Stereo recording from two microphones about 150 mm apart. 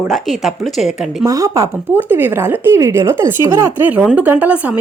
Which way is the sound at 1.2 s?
20° right (ahead or behind).